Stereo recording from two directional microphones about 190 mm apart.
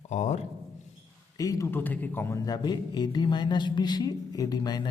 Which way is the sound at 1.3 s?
20° left (ahead or behind).